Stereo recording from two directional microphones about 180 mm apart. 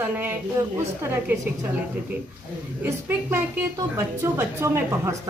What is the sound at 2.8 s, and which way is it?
A woman's voice, 15° right (ahead or behind).